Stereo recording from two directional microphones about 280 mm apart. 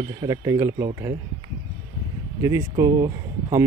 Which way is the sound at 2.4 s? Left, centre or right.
Centre.